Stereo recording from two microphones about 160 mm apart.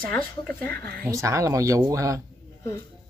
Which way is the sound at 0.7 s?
85° right.